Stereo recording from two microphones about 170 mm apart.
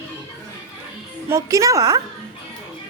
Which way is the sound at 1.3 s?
20° right (ahead or behind).